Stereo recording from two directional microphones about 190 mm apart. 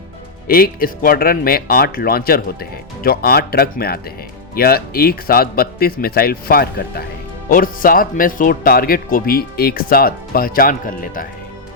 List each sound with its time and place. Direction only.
0.4 s speech: 50° left (ahead or behind)